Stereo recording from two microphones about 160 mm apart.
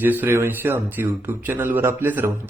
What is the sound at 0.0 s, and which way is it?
A man's voice, 10° right (ahead or behind).